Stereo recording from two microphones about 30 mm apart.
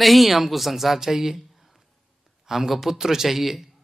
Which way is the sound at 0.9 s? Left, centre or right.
Centre.